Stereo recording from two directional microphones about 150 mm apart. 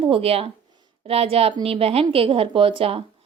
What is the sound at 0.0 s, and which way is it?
A woman's voice, 40° right (ahead or behind).